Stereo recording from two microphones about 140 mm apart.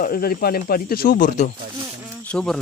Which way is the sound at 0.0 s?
90° left.